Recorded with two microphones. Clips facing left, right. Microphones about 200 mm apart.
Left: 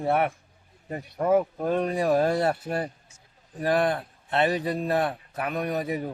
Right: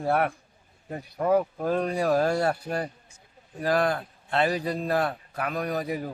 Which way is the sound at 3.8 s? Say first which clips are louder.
Left 1 dB; 25° left (ahead or behind).